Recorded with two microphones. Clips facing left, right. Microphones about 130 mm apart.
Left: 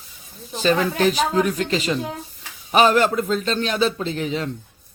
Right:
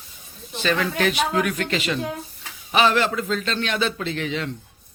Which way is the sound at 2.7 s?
45° left (ahead or behind).